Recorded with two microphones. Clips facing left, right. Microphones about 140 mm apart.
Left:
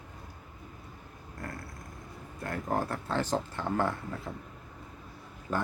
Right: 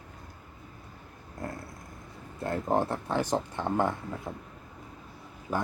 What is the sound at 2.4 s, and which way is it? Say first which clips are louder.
Speech: right 4 dB; 25° right (ahead or behind).